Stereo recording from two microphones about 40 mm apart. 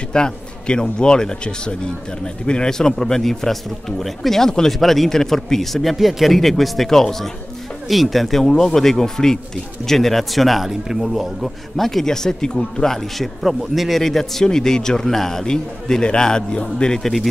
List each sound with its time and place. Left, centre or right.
0.1 s a man's voice: left
4.7 s a man's voice: centre
13.4 s a man's voice: centre; by 17.0 s left
17.0 s speech: centre